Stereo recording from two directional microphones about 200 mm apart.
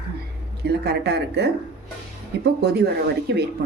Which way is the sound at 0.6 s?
55° right (ahead or behind).